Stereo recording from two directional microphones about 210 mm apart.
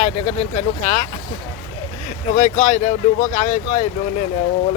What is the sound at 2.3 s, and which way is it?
Speech, 35° left (ahead or behind).